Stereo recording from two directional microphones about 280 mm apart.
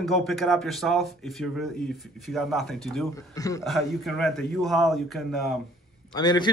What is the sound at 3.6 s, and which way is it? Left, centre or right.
Speech, centre.